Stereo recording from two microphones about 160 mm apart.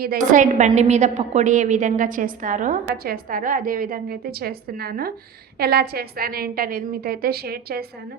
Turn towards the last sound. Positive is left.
turn(degrees=-75)  # may be behind; listen again after turning